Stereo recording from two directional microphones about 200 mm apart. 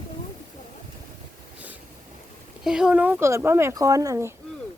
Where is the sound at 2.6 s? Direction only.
5° right (ahead or behind).